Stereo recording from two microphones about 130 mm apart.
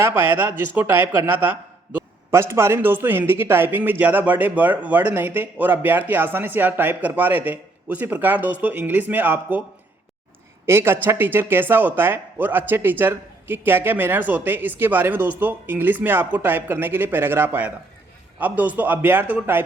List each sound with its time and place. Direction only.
0.0 s a man's voice: 15° right (ahead or behind)
10.7 s a man's voice: 20° right (ahead or behind)